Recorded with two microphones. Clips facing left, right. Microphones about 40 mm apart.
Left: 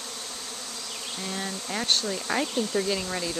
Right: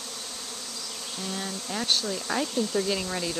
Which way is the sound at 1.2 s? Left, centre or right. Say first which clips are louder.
Even; centre.